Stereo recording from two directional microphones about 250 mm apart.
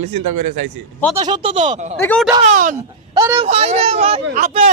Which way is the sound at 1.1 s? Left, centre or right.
Centre.